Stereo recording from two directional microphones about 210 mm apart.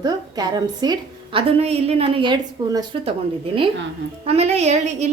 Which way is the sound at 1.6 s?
30° right (ahead or behind).